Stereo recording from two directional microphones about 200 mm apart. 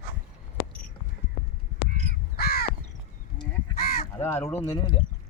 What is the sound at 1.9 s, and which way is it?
Crow, 35° right (ahead or behind).